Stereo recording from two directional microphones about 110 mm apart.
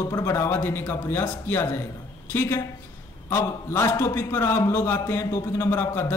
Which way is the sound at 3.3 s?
25° left (ahead or behind).